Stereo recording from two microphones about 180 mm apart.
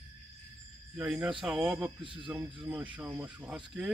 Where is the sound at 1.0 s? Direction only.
5° right (ahead or behind).